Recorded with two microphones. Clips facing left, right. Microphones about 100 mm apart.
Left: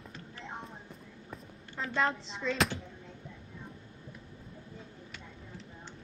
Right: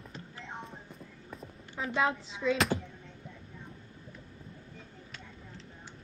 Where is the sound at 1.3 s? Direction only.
5° right (ahead or behind).